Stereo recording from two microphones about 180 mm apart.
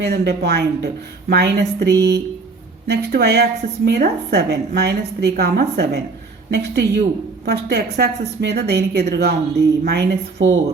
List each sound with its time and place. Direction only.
0.0 s a woman's voice: 65° right (ahead or behind)